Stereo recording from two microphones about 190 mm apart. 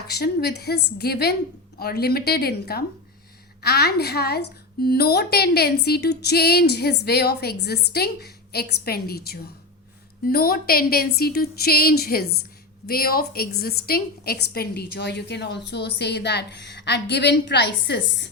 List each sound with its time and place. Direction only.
0.1 s a woman's voice: 60° left (ahead or behind)